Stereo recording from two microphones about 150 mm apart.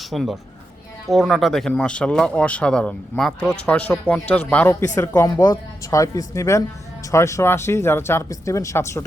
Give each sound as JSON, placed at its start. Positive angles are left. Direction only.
{"t": 0.0, "sound": "speech", "side_deg": 0}
{"t": 4.9, "sound": "speech", "side_deg": 20}